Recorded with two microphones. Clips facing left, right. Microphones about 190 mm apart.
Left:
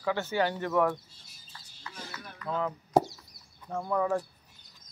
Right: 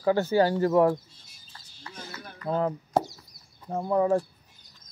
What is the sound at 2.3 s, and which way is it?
Speech, 35° right (ahead or behind).